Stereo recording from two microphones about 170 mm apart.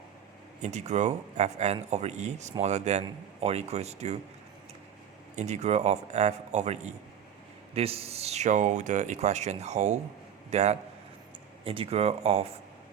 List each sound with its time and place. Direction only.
0.6 s speech: 45° right (ahead or behind)
5.4 s speech: 40° right (ahead or behind)